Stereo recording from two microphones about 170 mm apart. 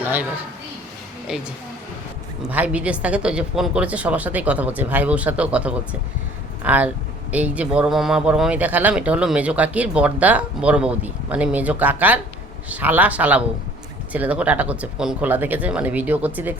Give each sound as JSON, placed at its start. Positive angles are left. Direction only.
{"t": 0.0, "sound": "a man's voice", "side_deg": -10}
{"t": 1.3, "sound": "speech", "side_deg": -5}
{"t": 2.5, "sound": "a man's voice", "side_deg": -10}